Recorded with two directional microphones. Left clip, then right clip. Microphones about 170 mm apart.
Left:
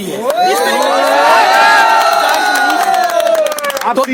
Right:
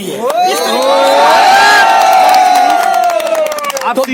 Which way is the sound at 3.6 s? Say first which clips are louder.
Even; 20° left (ahead or behind).